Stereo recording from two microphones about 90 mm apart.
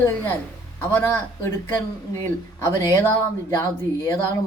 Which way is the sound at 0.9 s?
25° left (ahead or behind).